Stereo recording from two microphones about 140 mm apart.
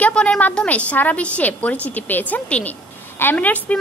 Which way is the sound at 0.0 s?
5° left (ahead or behind).